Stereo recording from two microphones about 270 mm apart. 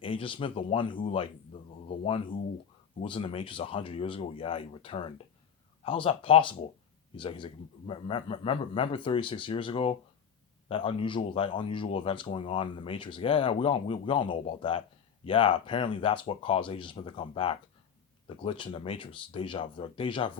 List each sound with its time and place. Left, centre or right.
0.0 s speech: centre